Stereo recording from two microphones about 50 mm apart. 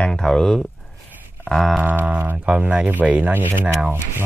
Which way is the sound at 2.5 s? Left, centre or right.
Centre.